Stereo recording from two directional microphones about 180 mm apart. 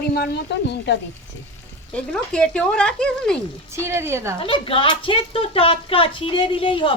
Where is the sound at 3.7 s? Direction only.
15° right (ahead or behind).